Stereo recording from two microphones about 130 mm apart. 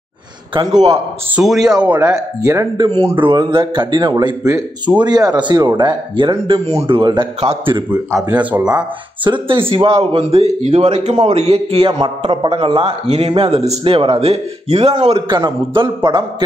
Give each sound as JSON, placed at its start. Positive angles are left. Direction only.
{"t": 1.4, "sound": "speech", "side_deg": -5}
{"t": 2.0, "sound": "speech", "side_deg": -25}
{"t": 3.0, "sound": "a man's voice", "side_deg": -45}
{"t": 8.1, "sound": "speech", "side_deg": -20}
{"t": 8.4, "sound": "speech", "side_deg": -10}
{"t": 9.2, "sound": "a man's voice", "side_deg": -40}